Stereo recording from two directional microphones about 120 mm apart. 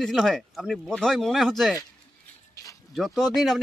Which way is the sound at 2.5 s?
25° left (ahead or behind).